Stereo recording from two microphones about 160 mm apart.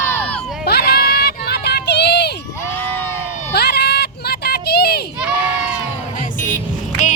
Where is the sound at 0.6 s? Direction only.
80° left.